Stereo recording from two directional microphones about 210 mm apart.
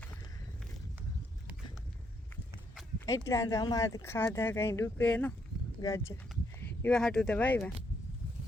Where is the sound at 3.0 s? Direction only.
15° left (ahead or behind).